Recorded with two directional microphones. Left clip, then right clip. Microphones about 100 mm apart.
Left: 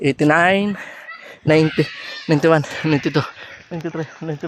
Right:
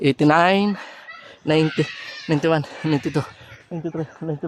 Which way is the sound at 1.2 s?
30° left (ahead or behind).